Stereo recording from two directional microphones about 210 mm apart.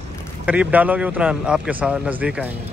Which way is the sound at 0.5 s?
5° right (ahead or behind).